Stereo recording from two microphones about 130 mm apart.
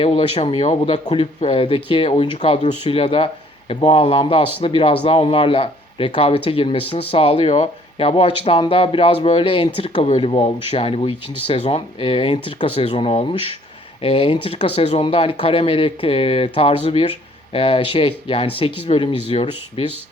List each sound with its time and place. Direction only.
0.0 s speech: 45° left (ahead or behind)
2.4 s speech: 55° left (ahead or behind)